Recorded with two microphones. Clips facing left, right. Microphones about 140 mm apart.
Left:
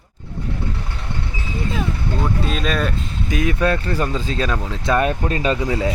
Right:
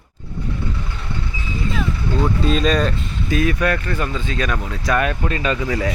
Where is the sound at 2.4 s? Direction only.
5° left (ahead or behind).